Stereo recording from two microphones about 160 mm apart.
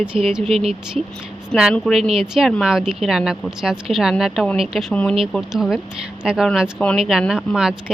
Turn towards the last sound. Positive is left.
turn(degrees=-5)  # may be behind; listen again after turning